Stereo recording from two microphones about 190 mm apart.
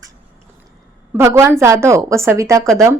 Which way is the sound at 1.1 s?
15° right (ahead or behind).